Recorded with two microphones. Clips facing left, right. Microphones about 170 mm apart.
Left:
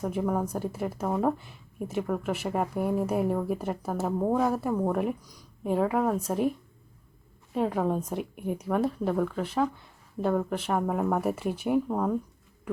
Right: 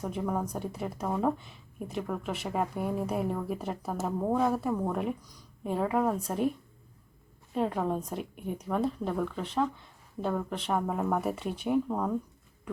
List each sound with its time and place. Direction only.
0.0 s speech: 10° left (ahead or behind)
7.5 s speech: centre (ahead or behind)
10.2 s speech: 20° left (ahead or behind)
10.5 s speech: 5° left (ahead or behind)
11.9 s speech: 15° left (ahead or behind)